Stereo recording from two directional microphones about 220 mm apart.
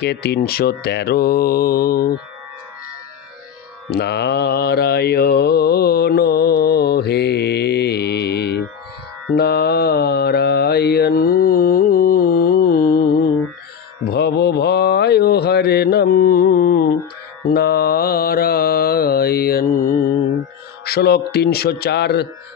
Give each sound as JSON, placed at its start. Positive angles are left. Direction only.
{"t": 0.0, "sound": "mantra", "side_deg": 50}
{"t": 3.9, "sound": "mantra", "side_deg": 50}